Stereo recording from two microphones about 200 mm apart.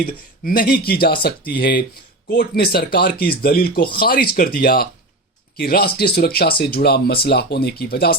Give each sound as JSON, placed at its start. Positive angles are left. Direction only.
{"t": 0.0, "sound": "speech", "side_deg": 45}